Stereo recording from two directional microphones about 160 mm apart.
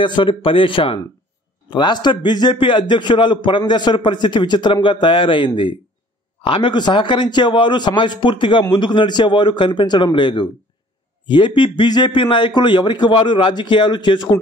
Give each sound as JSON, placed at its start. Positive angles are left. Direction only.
{"t": 0.0, "sound": "a man's voice", "side_deg": 30}